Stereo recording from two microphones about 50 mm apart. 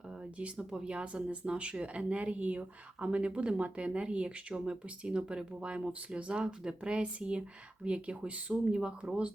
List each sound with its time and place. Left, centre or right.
0.3 s speech: right